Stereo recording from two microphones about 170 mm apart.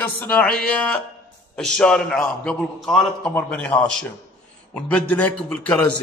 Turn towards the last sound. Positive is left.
turn(degrees=10)  # may be behind; listen again after turning